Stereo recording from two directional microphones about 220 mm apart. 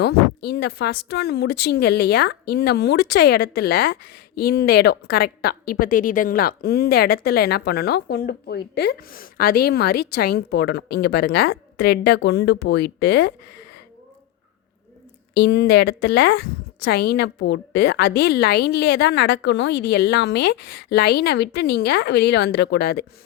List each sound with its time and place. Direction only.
0.0 s speech: 45° left (ahead or behind)
15.4 s speech: 50° left (ahead or behind)